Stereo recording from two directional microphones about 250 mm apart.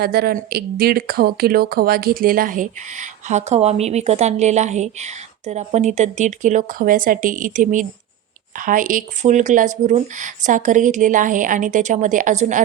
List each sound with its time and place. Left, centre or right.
0.0 s speech: right